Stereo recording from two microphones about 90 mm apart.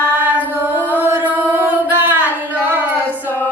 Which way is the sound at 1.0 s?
20° right (ahead or behind).